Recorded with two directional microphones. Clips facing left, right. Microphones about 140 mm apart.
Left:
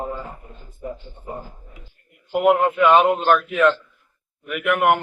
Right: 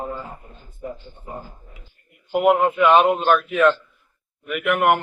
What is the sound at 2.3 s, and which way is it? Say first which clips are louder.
A man's voice: even; 5° right (ahead or behind).